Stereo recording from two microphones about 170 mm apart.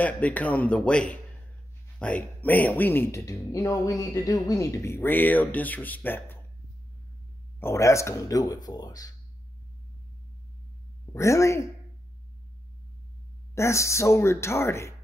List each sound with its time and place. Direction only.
0.0 s speech: 10° left (ahead or behind)
7.6 s speech: 15° left (ahead or behind)
11.1 s speech: 15° left (ahead or behind)
13.6 s speech: 15° left (ahead or behind)